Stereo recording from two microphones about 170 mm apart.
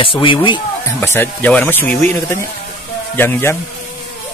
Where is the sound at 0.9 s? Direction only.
15° left (ahead or behind).